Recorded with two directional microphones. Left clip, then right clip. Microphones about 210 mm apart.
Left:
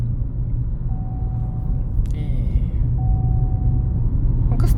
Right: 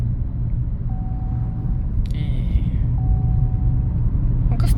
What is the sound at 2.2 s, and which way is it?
Vehicle, 10° left (ahead or behind).